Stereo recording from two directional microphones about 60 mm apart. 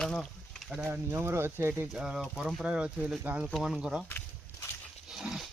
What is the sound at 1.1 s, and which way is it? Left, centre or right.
Speech, right.